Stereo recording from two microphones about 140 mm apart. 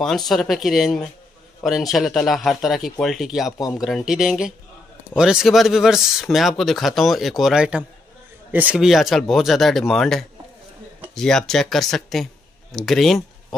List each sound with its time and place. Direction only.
0.0 s speech: centre (ahead or behind)
3.5 s speech: 25° left (ahead or behind)
3.8 s speech: centre (ahead or behind)